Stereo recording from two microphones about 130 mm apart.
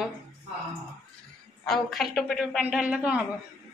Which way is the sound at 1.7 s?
Centre (ahead or behind).